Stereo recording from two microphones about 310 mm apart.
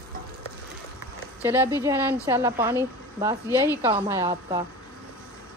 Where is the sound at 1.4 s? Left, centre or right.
Centre.